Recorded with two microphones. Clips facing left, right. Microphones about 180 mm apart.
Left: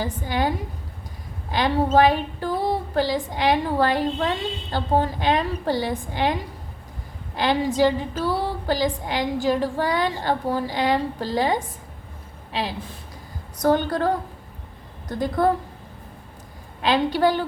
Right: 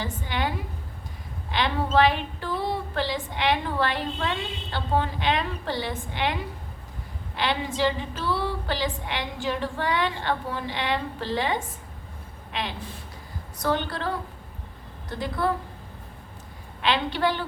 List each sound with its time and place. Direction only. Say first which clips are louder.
0.0 s a woman's voice: left 5 dB; 40° left (ahead or behind)
7.3 s a woman's voice: left 6 dB; 40° left (ahead or behind)
13.6 s a woman's voice: left 7 dB; 45° left (ahead or behind)
15.1 s a woman's voice: left 6 dB; 45° left (ahead or behind)
16.8 s a woman's voice: left 5 dB; 40° left (ahead or behind)